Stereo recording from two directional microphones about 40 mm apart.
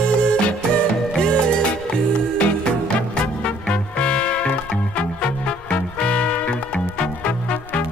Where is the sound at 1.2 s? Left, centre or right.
Left.